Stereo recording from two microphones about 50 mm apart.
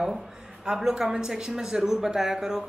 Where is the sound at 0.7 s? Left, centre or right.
Centre.